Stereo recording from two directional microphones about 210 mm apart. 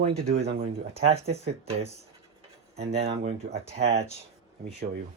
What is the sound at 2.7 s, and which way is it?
Speech, 30° right (ahead or behind).